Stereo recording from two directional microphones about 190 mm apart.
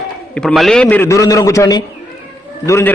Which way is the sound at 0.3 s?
Centre (ahead or behind).